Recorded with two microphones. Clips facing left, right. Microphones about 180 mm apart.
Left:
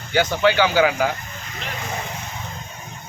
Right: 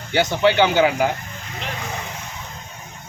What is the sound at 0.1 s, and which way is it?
Speech, 20° right (ahead or behind).